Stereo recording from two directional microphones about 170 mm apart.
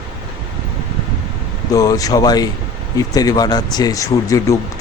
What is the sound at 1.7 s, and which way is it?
Speech, 20° left (ahead or behind).